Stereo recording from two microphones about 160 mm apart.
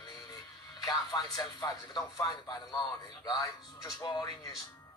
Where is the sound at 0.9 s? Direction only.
25° left (ahead or behind).